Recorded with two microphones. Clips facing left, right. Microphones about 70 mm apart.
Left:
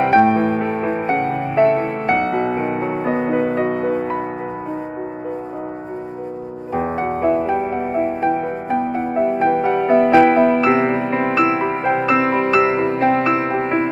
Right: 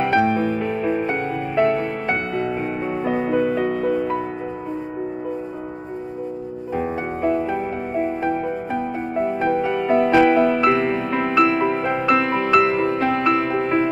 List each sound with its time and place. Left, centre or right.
0.0 s music: left
2.0 s music: left
6.7 s music: left
7.4 s music: centre
9.5 s music: left
11.3 s music: centre